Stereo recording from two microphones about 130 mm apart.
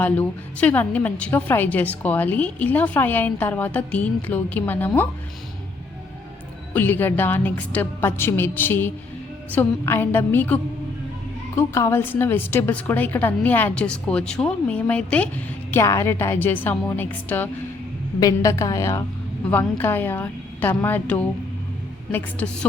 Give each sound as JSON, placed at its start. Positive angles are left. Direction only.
{"t": 0.0, "sound": "a woman's voice", "side_deg": 10}
{"t": 6.7, "sound": "a woman's voice", "side_deg": 15}
{"t": 15.7, "sound": "a woman's voice", "side_deg": 20}
{"t": 18.2, "sound": "a woman's voice", "side_deg": 25}
{"t": 22.4, "sound": "a woman's voice", "side_deg": 15}